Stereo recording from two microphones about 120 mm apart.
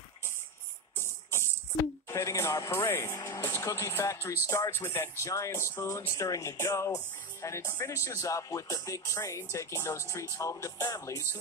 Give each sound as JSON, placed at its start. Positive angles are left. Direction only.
{"t": 0.9, "sound": "music", "side_deg": 20}
{"t": 2.0, "sound": "speech", "side_deg": 25}